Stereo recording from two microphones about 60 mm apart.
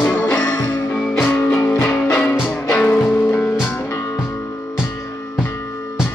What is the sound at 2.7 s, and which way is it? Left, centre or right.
Music, left.